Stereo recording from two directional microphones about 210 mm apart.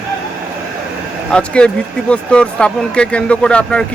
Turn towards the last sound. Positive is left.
turn(degrees=5)  # may be behind; listen again after turning